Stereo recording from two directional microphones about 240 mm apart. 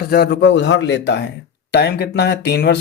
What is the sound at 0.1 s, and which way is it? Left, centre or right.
Speech, left.